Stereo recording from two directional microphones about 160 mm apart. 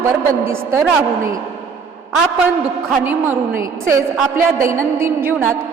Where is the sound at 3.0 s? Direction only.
10° right (ahead or behind).